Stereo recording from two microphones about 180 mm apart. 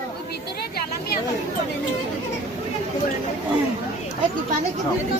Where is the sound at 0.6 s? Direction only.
60° left (ahead or behind).